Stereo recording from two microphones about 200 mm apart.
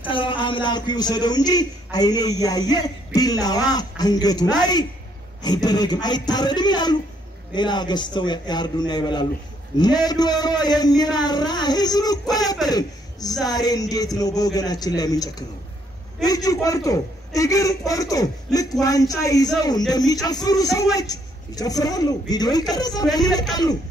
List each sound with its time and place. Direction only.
0.0 s a man's voice: 25° left (ahead or behind)